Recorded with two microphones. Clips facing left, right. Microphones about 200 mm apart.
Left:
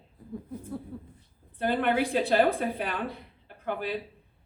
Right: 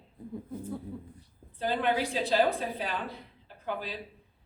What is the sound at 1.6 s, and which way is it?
A woman's voice, 55° left (ahead or behind).